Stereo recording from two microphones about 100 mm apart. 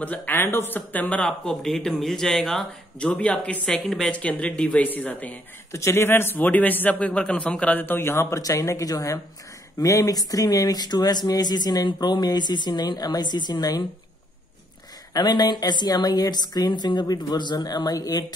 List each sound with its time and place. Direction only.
0.0 s speech: 15° left (ahead or behind); by 4.1 s centre (ahead or behind)
4.1 s speech: 15° left (ahead or behind)
5.7 s a man's voice: 30° left (ahead or behind); by 13.8 s 45° left (ahead or behind)
15.1 s a woman's voice: 45° left (ahead or behind)